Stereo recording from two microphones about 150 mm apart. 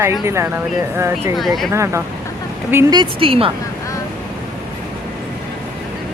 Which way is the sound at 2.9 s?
35° right (ahead or behind).